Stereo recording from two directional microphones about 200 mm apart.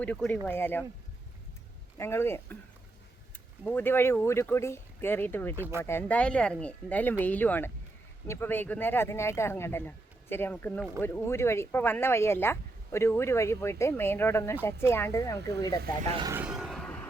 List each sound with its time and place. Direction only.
0.0 s speech: 5° left (ahead or behind)
2.0 s speech: 10° left (ahead or behind)
3.6 s speech: 10° left (ahead or behind)
5.5 s speech: 10° right (ahead or behind)
5.8 s speech: 10° left (ahead or behind)
16.0 s speech: 25° right (ahead or behind)
16.3 s a sound: 5° right (ahead or behind)